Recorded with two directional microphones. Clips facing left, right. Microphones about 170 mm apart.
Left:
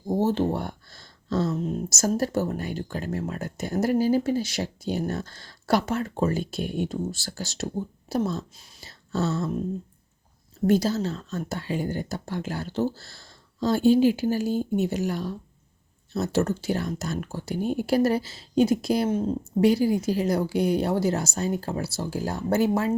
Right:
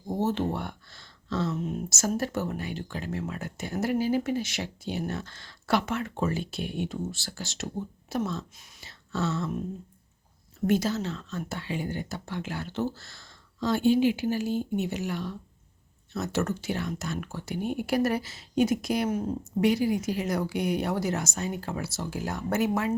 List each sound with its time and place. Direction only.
0.1 s speech: 35° left (ahead or behind)
10.7 s speech: 35° left (ahead or behind)